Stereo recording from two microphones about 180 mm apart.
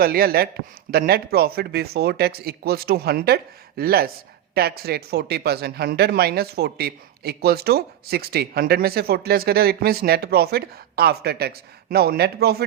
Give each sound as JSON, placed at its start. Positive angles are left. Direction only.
{"t": 0.0, "sound": "a man's voice", "side_deg": -55}